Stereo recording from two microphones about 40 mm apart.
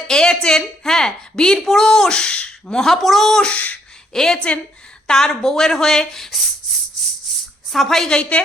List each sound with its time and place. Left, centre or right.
0.1 s a woman's voice: centre
2.8 s speech: centre
3.5 s a sound: left
4.1 s a woman's voice: centre
7.7 s a woman's voice: centre
8.1 s a woman's voice: left